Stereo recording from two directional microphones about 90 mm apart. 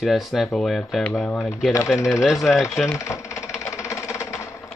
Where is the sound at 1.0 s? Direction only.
15° left (ahead or behind); by 2.8 s centre (ahead or behind).